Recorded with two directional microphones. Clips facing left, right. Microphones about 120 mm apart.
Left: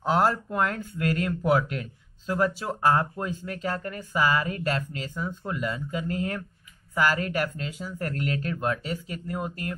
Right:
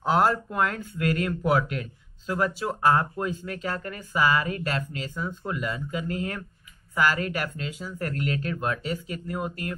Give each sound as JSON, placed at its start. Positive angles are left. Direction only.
{"t": 0.2, "sound": "speech", "side_deg": 30}